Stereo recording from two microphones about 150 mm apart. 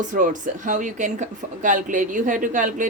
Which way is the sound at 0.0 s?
60° right (ahead or behind).